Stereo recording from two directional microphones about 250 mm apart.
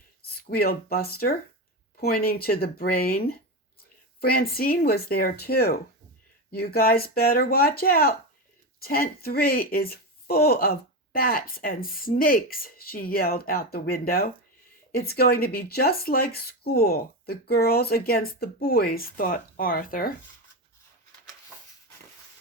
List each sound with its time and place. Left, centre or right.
0.4 s speech: left